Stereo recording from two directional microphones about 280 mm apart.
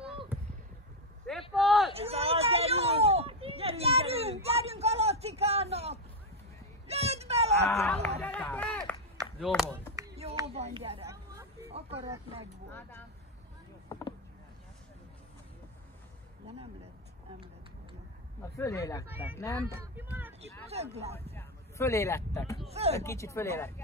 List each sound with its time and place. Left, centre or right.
1.5 s a sound: centre
2.0 s a sound: right
6.9 s vehicle: right
7.7 s speech: centre
8.2 s run: centre
9.4 s speech: centre
9.9 s a sound: centre
18.6 s speech: centre
19.0 s speech: centre
20.6 s speech: right
21.4 s speech: centre
22.7 s speech: right
22.9 s speech: centre